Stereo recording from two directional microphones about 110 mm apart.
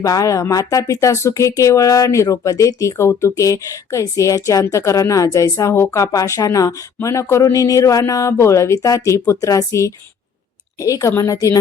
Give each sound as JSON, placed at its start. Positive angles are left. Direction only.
{"t": 0.0, "sound": "a woman's voice", "side_deg": 30}